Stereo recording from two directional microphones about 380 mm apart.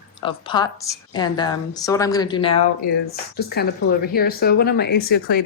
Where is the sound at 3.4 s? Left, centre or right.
Left.